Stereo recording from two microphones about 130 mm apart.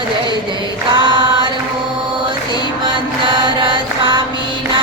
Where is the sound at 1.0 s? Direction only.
35° right (ahead or behind).